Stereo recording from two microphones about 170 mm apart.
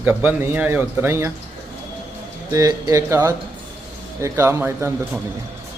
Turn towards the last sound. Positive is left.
turn(degrees=-15)  # may be behind; listen again after turning